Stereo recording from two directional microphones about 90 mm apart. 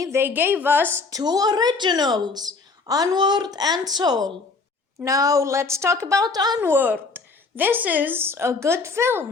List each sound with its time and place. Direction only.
0.0 s speech: 25° right (ahead or behind)
1.1 s a woman's voice: 45° right (ahead or behind)
6.6 s speech: 20° right (ahead or behind)